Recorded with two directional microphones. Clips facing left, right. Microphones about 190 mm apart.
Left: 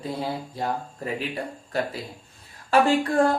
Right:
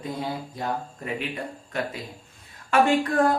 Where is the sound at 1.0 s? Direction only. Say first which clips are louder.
Left 4 dB; 35° left (ahead or behind).